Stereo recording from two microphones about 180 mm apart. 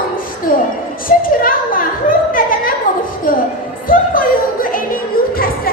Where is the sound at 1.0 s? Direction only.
50° left (ahead or behind).